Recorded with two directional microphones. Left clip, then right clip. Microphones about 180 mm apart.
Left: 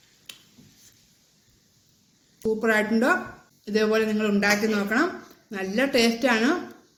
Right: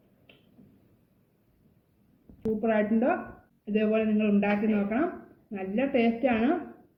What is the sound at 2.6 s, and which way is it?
A woman's voice, 20° left (ahead or behind).